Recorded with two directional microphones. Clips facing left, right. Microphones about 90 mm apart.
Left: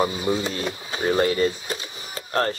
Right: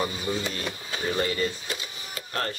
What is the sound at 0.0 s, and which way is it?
Speech, 30° left (ahead or behind).